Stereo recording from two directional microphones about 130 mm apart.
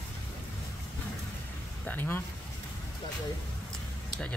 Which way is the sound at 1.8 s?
15° left (ahead or behind).